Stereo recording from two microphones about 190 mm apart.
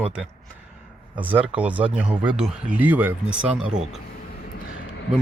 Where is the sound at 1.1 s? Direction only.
10° right (ahead or behind).